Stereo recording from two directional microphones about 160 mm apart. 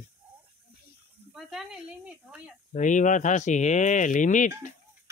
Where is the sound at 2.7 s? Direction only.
50° left (ahead or behind).